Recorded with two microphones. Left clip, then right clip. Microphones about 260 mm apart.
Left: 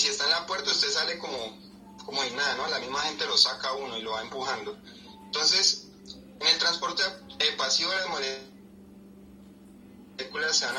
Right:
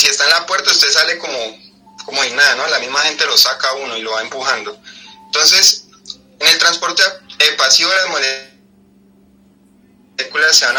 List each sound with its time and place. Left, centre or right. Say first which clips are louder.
0.0 s a man's voice: right 14 dB; right
10.2 s a man's voice: right 16 dB; right